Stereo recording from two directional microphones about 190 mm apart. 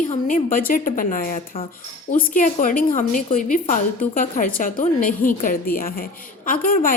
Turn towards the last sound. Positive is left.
turn(degrees=45)  # may be behind; listen again after turning